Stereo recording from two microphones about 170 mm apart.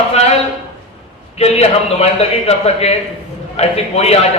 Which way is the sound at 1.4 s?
35° left (ahead or behind).